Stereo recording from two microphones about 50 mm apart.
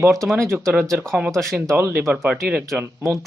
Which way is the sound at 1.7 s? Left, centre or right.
Right.